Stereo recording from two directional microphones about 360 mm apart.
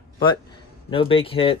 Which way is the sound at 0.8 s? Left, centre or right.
Centre.